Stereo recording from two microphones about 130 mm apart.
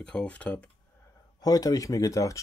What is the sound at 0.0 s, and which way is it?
Speech, 10° left (ahead or behind).